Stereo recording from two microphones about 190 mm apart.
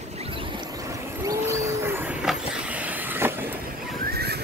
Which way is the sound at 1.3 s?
15° right (ahead or behind).